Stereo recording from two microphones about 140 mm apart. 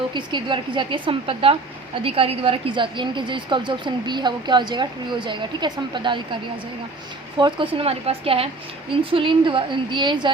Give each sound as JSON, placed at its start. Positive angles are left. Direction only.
{"t": 0.1, "sound": "a woman's voice", "side_deg": -35}
{"t": 7.3, "sound": "a woman's voice", "side_deg": -35}